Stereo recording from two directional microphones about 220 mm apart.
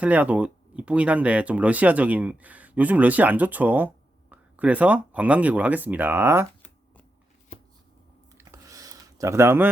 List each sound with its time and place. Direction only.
0.0 s speech: 5° right (ahead or behind)
7.5 s shuffling cards: 35° left (ahead or behind)
8.4 s a sound: 15° right (ahead or behind)